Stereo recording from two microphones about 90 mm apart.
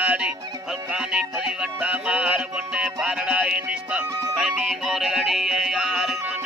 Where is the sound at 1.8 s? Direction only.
10° right (ahead or behind).